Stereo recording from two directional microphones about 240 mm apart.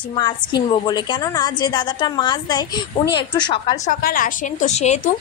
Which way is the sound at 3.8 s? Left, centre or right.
Left.